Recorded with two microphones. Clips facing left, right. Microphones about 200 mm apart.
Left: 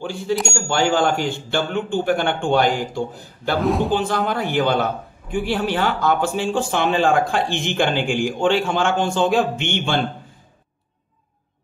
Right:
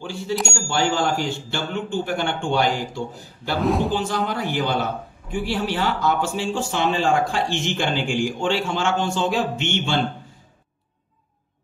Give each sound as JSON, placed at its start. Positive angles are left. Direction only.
{"t": 0.0, "sound": "speech", "side_deg": 55}
{"t": 3.6, "sound": "a man's voice", "side_deg": 0}
{"t": 3.9, "sound": "speech", "side_deg": 55}